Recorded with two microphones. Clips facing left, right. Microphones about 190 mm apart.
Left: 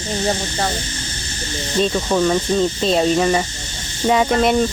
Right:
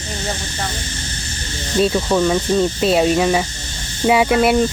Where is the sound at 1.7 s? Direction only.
5° right (ahead or behind).